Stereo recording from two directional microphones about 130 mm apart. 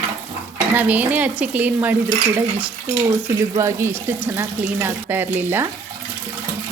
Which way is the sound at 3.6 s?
20° right (ahead or behind).